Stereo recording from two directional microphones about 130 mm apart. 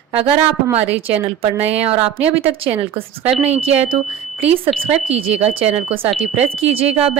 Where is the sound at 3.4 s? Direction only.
55° right (ahead or behind).